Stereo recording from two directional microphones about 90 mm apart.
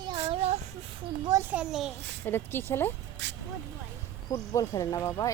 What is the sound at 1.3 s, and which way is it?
Speech, 40° right (ahead or behind).